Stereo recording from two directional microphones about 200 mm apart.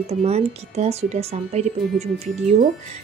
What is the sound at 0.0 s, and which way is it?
Speech, 30° right (ahead or behind).